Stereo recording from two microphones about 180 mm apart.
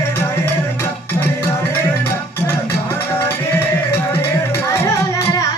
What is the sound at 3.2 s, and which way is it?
Music, 10° left (ahead or behind).